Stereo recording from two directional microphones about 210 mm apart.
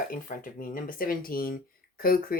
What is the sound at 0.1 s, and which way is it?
Speech, 40° left (ahead or behind).